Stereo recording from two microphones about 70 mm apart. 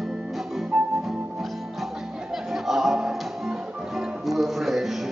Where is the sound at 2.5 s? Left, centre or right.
Centre.